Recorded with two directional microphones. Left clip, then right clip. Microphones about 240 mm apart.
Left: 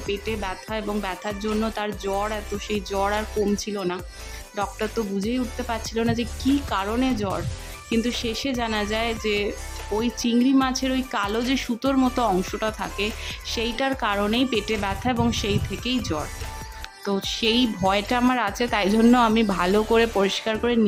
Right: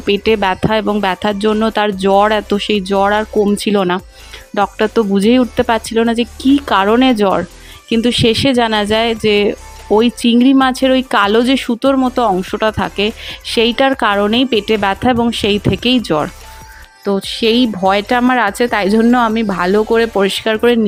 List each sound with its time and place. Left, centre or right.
0.1 s speech: right